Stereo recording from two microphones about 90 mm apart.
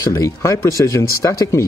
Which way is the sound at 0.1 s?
35° left (ahead or behind).